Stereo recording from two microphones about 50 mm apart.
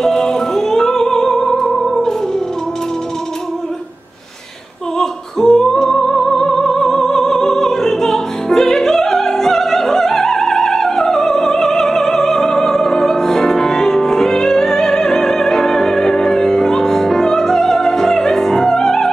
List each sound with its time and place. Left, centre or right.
0.0 s music: centre
4.9 s music: centre